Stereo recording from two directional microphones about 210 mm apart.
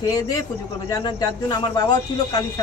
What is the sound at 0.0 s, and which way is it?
A man's voice, 15° left (ahead or behind).